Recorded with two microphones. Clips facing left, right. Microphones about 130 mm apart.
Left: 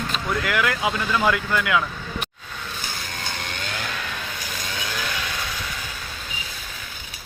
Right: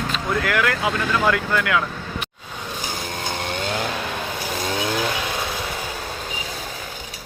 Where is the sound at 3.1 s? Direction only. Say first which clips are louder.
Right 7 dB; 25° right (ahead or behind).